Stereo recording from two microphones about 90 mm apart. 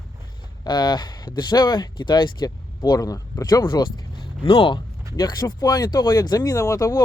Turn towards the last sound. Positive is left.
turn(degrees=40)  # may be behind; listen again after turning